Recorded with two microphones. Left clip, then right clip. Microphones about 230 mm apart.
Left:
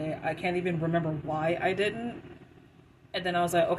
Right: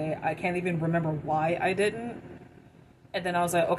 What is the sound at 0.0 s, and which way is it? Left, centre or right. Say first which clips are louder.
A woman's voice: right 2 dB; centre.